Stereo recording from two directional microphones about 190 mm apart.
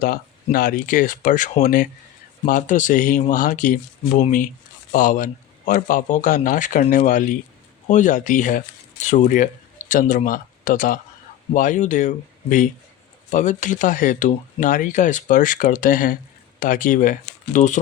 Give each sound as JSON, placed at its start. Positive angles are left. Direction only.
{"t": 0.0, "sound": "speech", "side_deg": 50}